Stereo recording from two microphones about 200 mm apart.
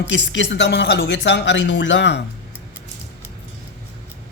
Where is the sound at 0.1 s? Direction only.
65° left (ahead or behind).